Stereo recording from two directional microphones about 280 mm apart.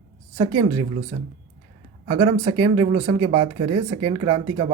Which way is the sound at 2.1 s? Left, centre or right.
Centre.